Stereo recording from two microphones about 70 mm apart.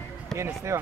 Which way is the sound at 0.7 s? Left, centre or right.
Right.